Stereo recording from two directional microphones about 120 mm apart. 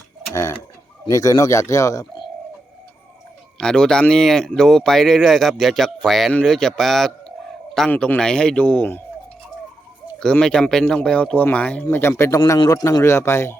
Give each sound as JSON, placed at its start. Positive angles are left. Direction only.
{"t": 0.3, "sound": "speech", "side_deg": 25}
{"t": 3.6, "sound": "speech", "side_deg": 5}
{"t": 10.2, "sound": "speech", "side_deg": 5}